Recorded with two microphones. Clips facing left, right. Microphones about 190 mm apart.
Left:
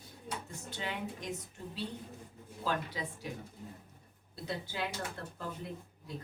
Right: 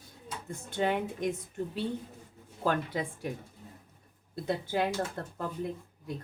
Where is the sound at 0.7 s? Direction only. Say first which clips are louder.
Right 10 dB; 55° right (ahead or behind).